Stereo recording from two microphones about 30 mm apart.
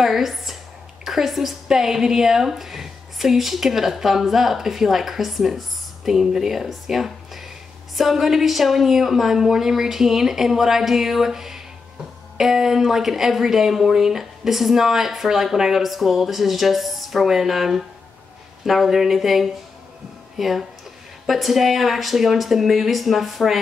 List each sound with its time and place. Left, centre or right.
0.0 s a woman's voice: centre